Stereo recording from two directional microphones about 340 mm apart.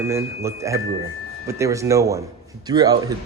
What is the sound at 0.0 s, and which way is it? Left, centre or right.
Speech, centre.